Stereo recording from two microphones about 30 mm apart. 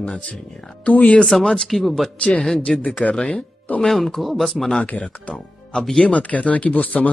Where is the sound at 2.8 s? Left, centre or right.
Left.